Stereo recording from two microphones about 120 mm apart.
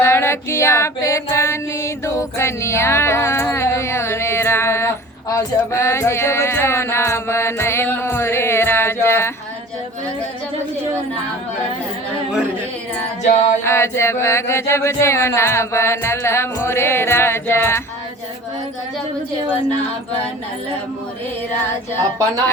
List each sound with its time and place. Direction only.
0.0 s music: 20° left (ahead or behind)
13.7 s music: 20° left (ahead or behind)